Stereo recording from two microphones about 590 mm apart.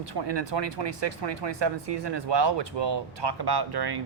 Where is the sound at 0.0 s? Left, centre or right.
Right.